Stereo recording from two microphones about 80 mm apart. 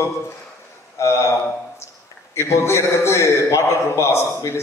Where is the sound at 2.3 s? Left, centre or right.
Left.